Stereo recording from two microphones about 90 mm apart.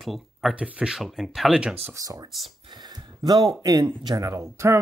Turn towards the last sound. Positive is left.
turn(degrees=-35)  # may be behind; listen again after turning